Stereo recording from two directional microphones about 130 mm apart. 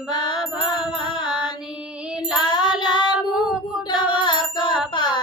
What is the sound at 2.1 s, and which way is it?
Music, 10° right (ahead or behind).